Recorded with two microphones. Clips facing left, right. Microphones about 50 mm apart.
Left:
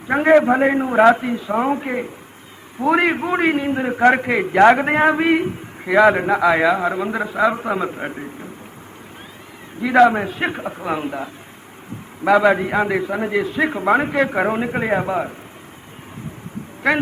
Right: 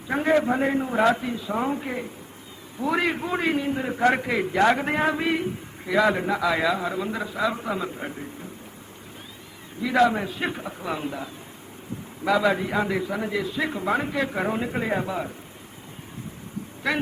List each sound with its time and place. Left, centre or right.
0.1 s a man's voice: left
9.8 s a man's voice: left
16.8 s speech: left